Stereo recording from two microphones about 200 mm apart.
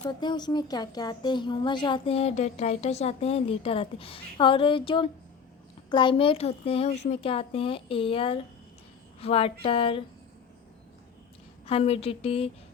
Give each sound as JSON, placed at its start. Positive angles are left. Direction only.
{"t": 0.0, "sound": "a woman's voice", "side_deg": 20}
{"t": 11.6, "sound": "a woman's voice", "side_deg": 30}